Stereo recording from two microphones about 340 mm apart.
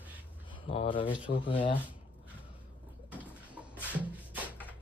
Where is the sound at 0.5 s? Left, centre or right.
Centre.